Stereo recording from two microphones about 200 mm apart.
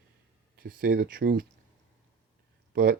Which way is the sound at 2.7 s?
50° right (ahead or behind).